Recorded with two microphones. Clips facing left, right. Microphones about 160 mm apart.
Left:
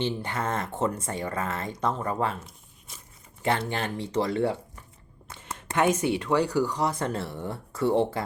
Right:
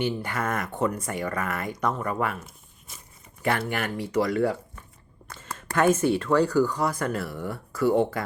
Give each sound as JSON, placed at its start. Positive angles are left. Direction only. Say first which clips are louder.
{"t": 0.0, "sound": "speech", "louder": "right 1 dB", "side_deg": 25}
{"t": 3.7, "sound": "speech", "louder": "right 1 dB", "side_deg": 25}